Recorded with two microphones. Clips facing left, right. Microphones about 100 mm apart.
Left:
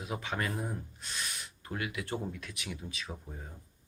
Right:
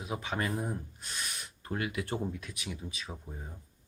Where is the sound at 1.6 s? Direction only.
30° right (ahead or behind).